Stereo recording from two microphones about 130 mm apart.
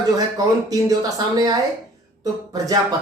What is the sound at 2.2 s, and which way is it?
Speech, 30° right (ahead or behind).